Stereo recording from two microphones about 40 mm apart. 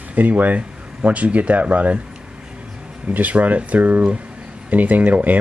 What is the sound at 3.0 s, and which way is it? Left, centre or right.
Speech, right.